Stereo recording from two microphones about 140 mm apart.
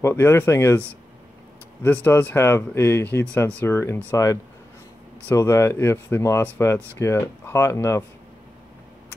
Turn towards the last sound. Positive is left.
turn(degrees=20)  # may be behind; listen again after turning